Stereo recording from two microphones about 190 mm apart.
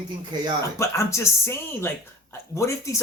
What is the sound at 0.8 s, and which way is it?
Speech, 15° left (ahead or behind).